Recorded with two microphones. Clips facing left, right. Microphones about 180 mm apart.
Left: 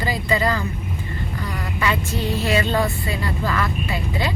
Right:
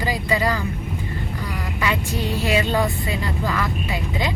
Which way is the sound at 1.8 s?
15° right (ahead or behind).